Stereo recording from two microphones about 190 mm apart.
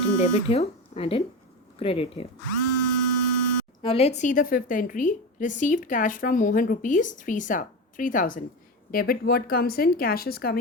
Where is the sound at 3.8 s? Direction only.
30° left (ahead or behind).